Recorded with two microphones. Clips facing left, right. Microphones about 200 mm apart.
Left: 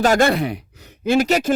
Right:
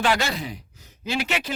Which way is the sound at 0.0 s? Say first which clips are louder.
Left 8 dB; 50° left (ahead or behind).